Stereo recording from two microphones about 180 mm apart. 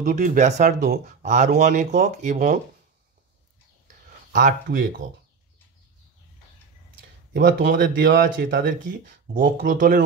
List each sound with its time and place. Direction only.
0.0 s speech: 45° right (ahead or behind)
3.8 s a sound: 50° right (ahead or behind)
7.3 s speech: 50° right (ahead or behind)